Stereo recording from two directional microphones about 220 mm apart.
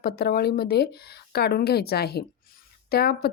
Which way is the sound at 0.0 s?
45° left (ahead or behind).